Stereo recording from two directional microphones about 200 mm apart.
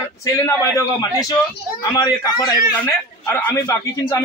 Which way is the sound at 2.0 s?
20° left (ahead or behind).